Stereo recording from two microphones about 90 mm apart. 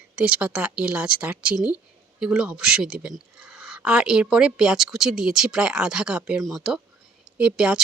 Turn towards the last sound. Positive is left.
turn(degrees=-10)  # may be behind; listen again after turning